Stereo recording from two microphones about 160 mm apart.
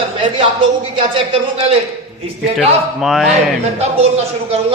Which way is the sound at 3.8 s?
40° right (ahead or behind).